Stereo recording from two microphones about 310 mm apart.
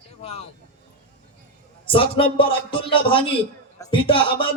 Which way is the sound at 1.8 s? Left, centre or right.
Centre.